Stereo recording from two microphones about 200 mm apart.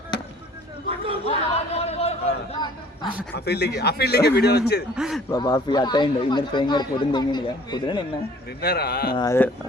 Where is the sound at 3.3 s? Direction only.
55° left (ahead or behind).